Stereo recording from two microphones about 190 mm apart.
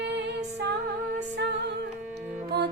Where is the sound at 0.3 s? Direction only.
65° right (ahead or behind).